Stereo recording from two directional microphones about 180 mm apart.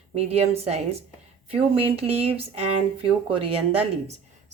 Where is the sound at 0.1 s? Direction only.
35° right (ahead or behind).